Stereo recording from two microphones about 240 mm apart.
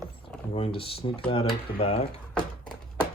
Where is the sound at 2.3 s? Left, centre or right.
Centre.